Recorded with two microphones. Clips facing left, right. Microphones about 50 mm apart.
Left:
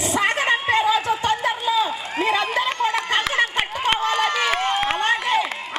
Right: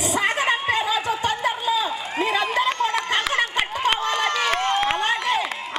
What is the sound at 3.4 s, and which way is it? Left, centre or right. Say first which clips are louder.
Run: left 1 dB; centre.